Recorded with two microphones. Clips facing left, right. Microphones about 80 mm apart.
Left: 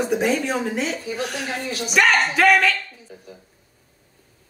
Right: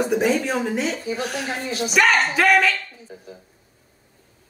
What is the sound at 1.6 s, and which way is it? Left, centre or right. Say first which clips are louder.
Speech: right 2 dB; right.